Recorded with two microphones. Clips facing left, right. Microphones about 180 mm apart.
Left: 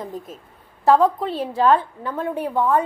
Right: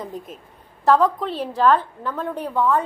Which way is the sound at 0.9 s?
15° left (ahead or behind).